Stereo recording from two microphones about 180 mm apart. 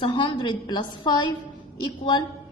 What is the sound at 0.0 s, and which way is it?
A woman's voice, 30° left (ahead or behind).